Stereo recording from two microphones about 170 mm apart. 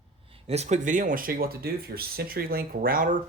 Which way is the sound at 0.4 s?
40° right (ahead or behind).